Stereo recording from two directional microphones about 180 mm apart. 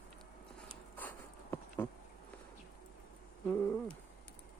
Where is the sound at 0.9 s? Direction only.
10° left (ahead or behind).